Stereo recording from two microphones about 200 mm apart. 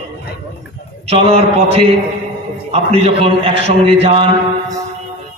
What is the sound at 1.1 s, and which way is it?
A man's voice, 30° right (ahead or behind).